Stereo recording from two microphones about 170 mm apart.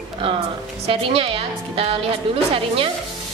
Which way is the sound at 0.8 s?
35° right (ahead or behind).